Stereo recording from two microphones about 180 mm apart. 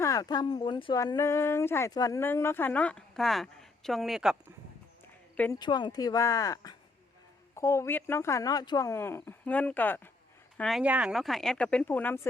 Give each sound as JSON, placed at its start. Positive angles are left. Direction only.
{"t": 0.0, "sound": "speech", "side_deg": 20}
{"t": 5.5, "sound": "speech", "side_deg": 25}
{"t": 10.6, "sound": "speech", "side_deg": 0}